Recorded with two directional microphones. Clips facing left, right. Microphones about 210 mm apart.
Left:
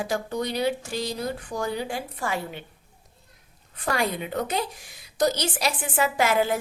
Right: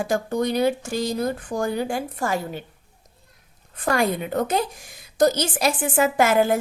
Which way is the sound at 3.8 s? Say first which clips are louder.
Right 5 dB; 50° right (ahead or behind).